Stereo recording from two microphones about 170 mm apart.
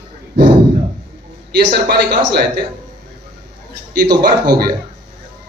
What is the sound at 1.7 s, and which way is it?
Speech, 75° right (ahead or behind).